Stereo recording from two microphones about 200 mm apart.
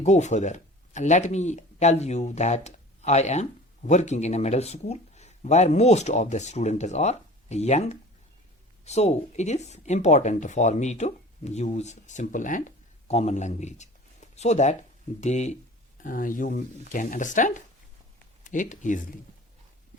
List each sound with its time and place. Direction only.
0.0 s speech: 35° left (ahead or behind)